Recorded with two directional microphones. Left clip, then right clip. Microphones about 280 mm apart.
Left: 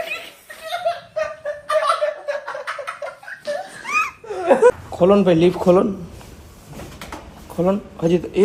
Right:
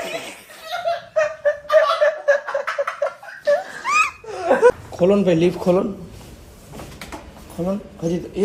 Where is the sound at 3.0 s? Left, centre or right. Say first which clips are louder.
Right 7 dB; right.